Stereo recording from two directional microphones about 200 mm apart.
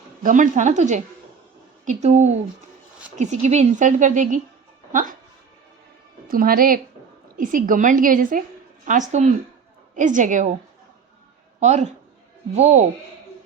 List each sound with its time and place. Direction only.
0.2 s a woman's voice: 40° right (ahead or behind)
6.2 s a woman's voice: 45° right (ahead or behind)
11.6 s a woman's voice: 35° right (ahead or behind)